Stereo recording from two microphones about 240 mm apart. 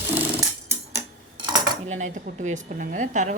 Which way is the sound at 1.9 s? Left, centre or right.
Right.